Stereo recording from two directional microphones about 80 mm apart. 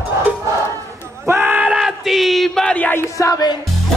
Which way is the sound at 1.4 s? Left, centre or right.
Centre.